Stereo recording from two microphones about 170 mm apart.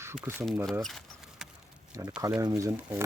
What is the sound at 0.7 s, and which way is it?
Keys jangling, centre (ahead or behind).